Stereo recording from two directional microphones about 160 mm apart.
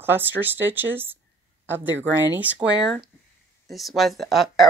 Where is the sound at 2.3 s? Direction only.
10° right (ahead or behind).